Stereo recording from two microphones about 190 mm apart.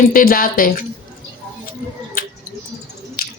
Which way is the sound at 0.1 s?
50° left (ahead or behind).